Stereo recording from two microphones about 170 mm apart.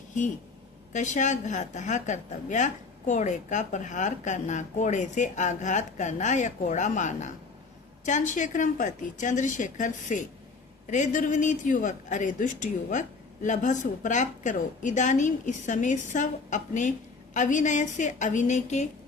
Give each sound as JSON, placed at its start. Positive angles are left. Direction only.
{"t": 0.9, "sound": "a woman's voice", "side_deg": 45}